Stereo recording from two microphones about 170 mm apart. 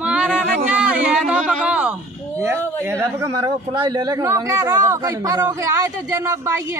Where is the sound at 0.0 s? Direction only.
5° right (ahead or behind).